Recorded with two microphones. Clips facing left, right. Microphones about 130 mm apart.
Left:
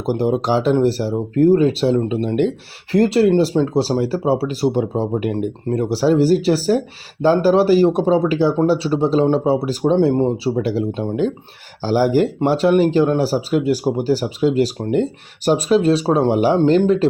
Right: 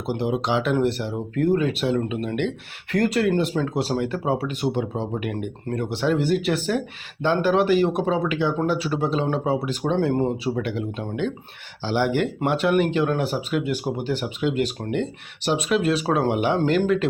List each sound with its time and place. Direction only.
0.0 s speech: 40° left (ahead or behind)